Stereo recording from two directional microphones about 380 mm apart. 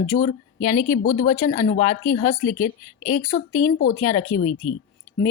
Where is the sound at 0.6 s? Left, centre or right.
Left.